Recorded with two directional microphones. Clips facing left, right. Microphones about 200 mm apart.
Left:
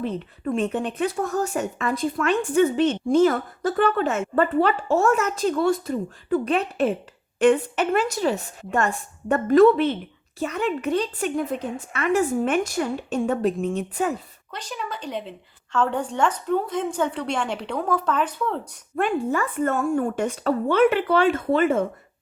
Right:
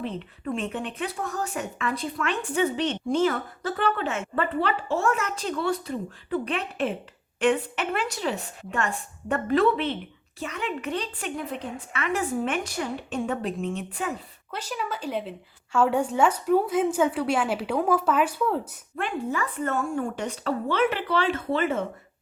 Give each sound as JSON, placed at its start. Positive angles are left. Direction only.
{"t": 0.5, "sound": "speech", "side_deg": 40}
{"t": 14.5, "sound": "a woman's voice", "side_deg": -5}
{"t": 18.9, "sound": "speech", "side_deg": 50}